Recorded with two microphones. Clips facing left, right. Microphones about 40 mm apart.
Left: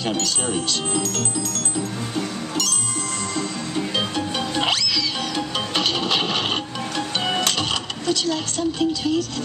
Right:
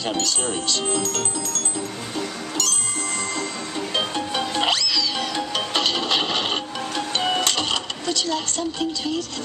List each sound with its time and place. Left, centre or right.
0.0 s speech: centre
3.3 s music: centre
8.1 s speech: centre